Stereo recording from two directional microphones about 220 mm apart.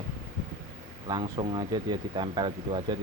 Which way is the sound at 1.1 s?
20° right (ahead or behind).